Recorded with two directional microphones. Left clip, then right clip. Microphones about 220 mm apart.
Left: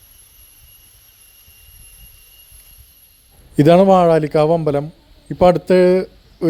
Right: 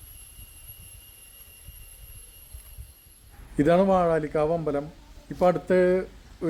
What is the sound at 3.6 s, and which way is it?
A man's voice, 35° left (ahead or behind).